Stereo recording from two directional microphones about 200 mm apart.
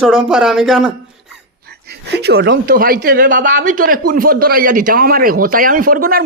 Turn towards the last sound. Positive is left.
turn(degrees=-45)  # may be behind; listen again after turning